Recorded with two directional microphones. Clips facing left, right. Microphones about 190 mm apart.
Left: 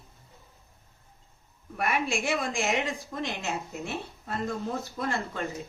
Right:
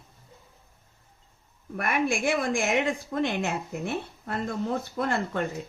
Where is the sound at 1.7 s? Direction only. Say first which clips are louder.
Right 2 dB; 55° right (ahead or behind).